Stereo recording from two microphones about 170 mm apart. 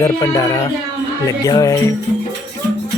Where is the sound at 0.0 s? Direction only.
20° left (ahead or behind).